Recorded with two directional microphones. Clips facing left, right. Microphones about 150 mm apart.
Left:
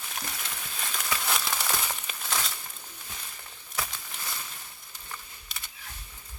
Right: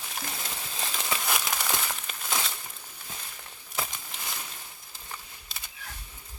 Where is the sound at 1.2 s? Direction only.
5° right (ahead or behind).